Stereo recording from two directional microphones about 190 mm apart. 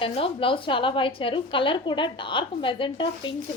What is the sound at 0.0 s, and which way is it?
A woman's voice, 30° left (ahead or behind).